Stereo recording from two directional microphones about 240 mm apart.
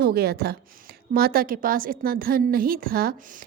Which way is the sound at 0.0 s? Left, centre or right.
Right.